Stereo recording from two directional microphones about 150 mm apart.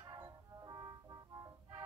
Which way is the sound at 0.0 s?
25° right (ahead or behind).